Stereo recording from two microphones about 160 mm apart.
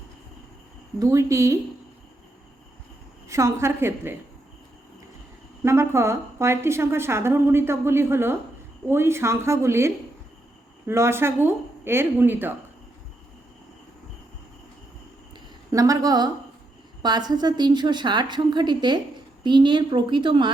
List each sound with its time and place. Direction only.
0.9 s a woman's voice: 20° right (ahead or behind)
3.2 s a woman's voice: 20° right (ahead or behind)
5.6 s a woman's voice: 15° right (ahead or behind)
15.7 s a woman's voice: 20° right (ahead or behind)